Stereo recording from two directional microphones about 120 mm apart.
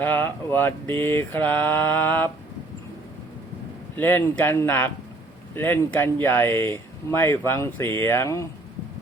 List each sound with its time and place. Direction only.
0.0 s mantra: 15° left (ahead or behind)
3.9 s mantra: 15° left (ahead or behind)
5.5 s speech: 20° left (ahead or behind)